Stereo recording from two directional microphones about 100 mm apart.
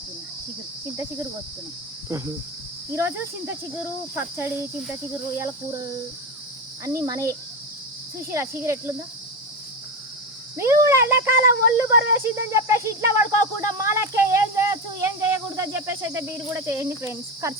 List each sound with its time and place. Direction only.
2.0 s speech: 30° right (ahead or behind)
6.8 s speech: 30° right (ahead or behind)
10.6 s speech: 30° right (ahead or behind)